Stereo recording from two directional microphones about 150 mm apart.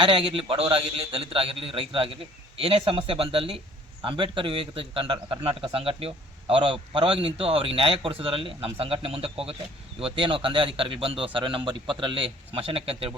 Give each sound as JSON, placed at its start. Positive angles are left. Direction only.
{"t": 0.0, "sound": "a man's voice", "side_deg": -35}